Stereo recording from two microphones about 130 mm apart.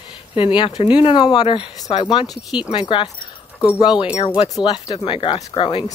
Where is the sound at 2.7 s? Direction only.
40° left (ahead or behind).